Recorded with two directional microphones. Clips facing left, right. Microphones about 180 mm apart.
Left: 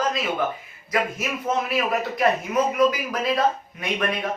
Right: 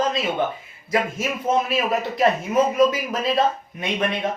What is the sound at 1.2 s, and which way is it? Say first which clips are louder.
Speech: right 3 dB; 25° right (ahead or behind).